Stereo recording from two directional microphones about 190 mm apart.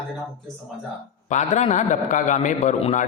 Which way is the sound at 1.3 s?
40° left (ahead or behind).